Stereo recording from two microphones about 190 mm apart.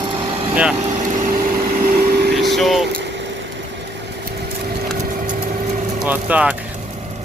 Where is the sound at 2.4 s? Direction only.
Centre (ahead or behind).